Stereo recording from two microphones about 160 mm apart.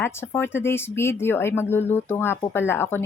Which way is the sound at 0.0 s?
15° left (ahead or behind).